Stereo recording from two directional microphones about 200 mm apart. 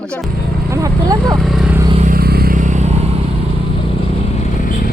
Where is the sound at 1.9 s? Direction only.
40° right (ahead or behind).